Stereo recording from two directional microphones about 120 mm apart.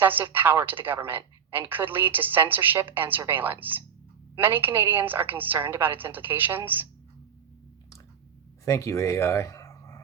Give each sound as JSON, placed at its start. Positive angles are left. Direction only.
{"t": 0.0, "sound": "a woman's voice", "side_deg": -15}
{"t": 8.6, "sound": "speech", "side_deg": 25}